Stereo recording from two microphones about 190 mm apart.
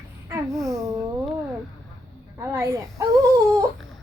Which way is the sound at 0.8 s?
15° right (ahead or behind).